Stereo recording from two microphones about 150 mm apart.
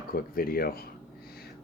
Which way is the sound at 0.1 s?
80° left.